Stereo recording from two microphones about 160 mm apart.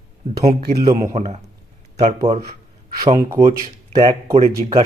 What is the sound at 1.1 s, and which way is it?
Speech, 45° right (ahead or behind).